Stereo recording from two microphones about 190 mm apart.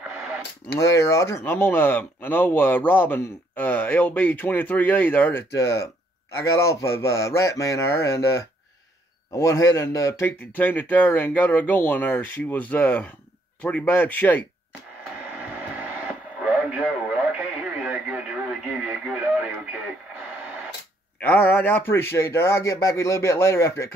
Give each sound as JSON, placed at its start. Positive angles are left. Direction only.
{"t": 0.7, "sound": "speech", "side_deg": 15}
{"t": 15.3, "sound": "radio", "side_deg": -10}
{"t": 21.2, "sound": "speech", "side_deg": 10}